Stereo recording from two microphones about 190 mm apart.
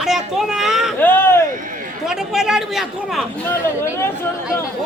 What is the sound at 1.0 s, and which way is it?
Speech, 10° left (ahead or behind).